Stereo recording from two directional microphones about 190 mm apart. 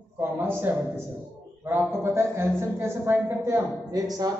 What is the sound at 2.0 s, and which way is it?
A man's voice, 15° right (ahead or behind).